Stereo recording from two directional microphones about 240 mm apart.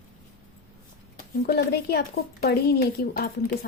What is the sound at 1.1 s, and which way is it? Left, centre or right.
A woman's voice, left.